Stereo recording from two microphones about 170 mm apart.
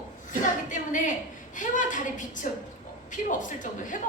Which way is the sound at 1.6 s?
50° left (ahead or behind).